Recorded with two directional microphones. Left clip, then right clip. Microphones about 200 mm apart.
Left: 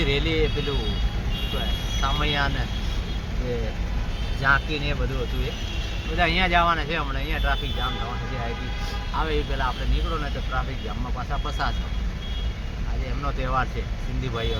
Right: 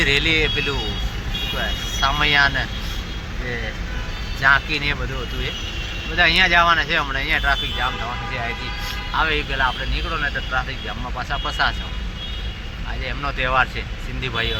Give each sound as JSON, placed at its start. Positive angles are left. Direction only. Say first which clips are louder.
{"t": 0.0, "sound": "speech", "louder": "right 7 dB", "side_deg": -5}
{"t": 2.0, "sound": "speech", "louder": "right 9 dB", "side_deg": -10}
{"t": 4.4, "sound": "speech", "louder": "right 6 dB", "side_deg": -5}
{"t": 6.1, "sound": "speech", "louder": "right 6 dB", "side_deg": 5}
{"t": 9.1, "sound": "speech", "louder": "right 7 dB", "side_deg": 0}
{"t": 13.2, "sound": "speech", "louder": "right 7 dB", "side_deg": 0}